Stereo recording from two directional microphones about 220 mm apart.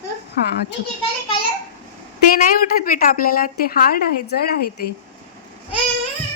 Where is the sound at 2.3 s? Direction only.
40° left (ahead or behind).